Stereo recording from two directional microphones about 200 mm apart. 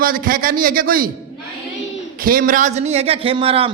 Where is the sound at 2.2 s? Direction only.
45° right (ahead or behind); by 3.7 s 25° right (ahead or behind).